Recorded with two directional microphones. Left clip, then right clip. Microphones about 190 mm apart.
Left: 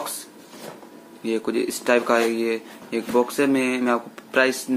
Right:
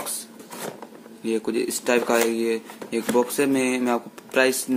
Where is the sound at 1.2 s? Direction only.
15° right (ahead or behind).